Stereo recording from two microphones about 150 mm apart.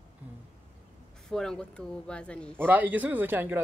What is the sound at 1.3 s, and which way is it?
A woman's voice, 5° left (ahead or behind).